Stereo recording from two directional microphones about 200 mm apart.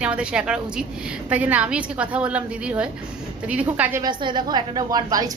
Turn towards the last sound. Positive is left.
turn(degrees=-20)  # may be behind; listen again after turning